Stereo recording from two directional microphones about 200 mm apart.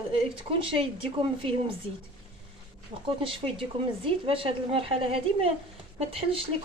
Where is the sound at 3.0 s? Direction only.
25° right (ahead or behind).